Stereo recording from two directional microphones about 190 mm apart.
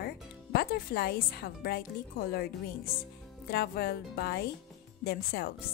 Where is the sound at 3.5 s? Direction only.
55° left (ahead or behind).